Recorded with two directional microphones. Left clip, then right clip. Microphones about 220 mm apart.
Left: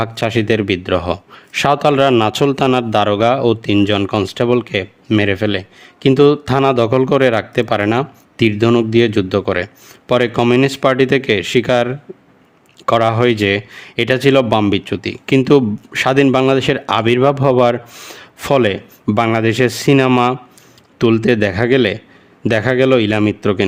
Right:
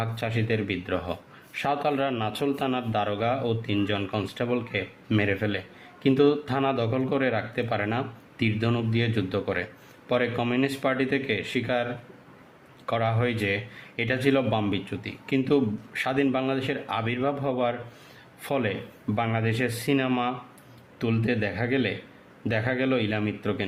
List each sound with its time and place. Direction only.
0.0 s a man's voice: 50° left (ahead or behind)